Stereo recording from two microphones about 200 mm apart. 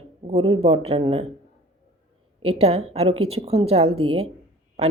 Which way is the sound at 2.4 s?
30° right (ahead or behind).